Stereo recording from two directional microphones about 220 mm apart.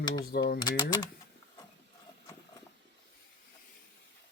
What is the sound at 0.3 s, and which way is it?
Mechanisms, 45° left (ahead or behind).